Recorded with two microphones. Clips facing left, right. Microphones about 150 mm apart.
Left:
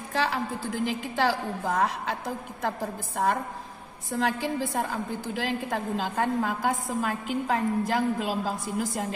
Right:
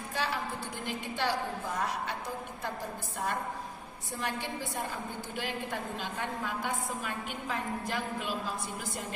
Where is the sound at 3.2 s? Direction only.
90° left.